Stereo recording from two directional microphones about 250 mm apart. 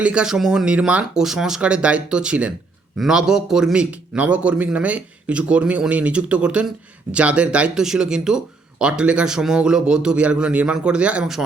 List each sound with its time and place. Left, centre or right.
0.0 s a man's voice: centre